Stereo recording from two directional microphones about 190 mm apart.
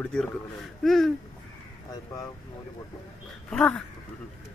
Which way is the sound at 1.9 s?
20° left (ahead or behind).